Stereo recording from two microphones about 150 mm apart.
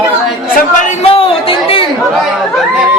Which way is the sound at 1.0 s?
40° left (ahead or behind).